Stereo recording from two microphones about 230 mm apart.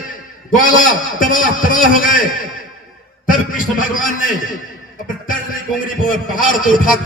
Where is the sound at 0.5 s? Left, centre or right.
Left.